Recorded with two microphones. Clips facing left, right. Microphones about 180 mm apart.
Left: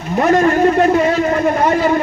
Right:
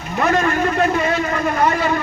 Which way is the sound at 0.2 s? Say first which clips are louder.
Left 6 dB; 35° left (ahead or behind).